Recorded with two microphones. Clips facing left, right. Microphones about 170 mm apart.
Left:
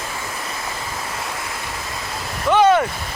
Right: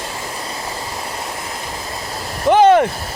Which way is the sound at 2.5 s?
35° right (ahead or behind).